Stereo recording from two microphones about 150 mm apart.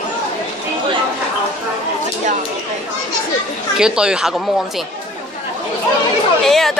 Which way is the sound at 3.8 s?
5° right (ahead or behind).